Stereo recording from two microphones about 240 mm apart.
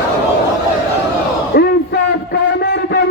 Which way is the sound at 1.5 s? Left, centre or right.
Left.